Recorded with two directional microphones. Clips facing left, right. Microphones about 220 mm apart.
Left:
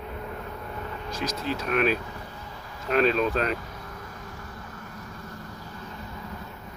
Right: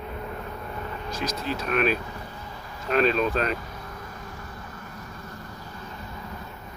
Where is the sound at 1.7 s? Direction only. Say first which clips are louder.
Even; 15° left (ahead or behind).